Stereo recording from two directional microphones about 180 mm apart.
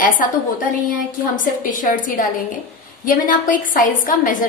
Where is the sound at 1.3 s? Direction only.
45° left (ahead or behind).